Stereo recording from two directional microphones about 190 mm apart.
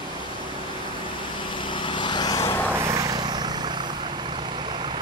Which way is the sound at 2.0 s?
25° left (ahead or behind).